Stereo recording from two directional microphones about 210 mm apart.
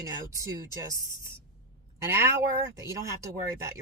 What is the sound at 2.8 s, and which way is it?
Speech, 15° right (ahead or behind).